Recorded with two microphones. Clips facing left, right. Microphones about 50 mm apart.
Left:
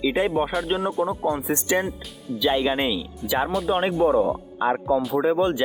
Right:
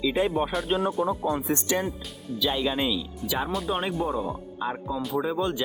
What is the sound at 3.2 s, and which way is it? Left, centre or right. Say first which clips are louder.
Speech: left 6 dB; centre.